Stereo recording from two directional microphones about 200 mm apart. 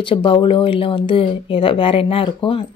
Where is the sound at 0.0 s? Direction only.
25° left (ahead or behind).